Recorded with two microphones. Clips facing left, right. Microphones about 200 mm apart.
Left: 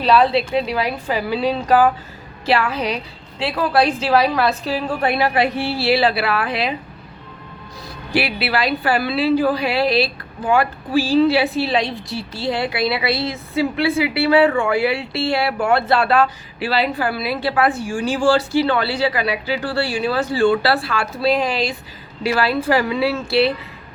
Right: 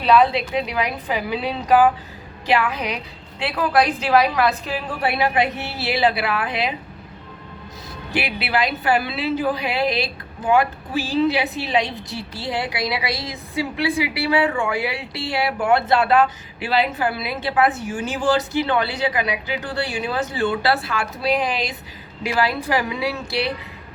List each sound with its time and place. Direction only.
0.1 s a woman's voice: 30° left (ahead or behind)
0.9 s a woman's voice: 15° right (ahead or behind)
3.4 s a woman's voice: 30° left (ahead or behind)
5.0 s a woman's voice: 15° right (ahead or behind)
8.1 s a woman's voice: 20° right (ahead or behind)